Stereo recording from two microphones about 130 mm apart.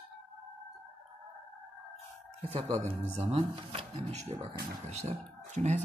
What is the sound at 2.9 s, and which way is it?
Speech, 55° right (ahead or behind).